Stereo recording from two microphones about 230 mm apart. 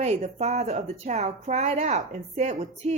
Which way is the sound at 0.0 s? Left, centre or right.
Right.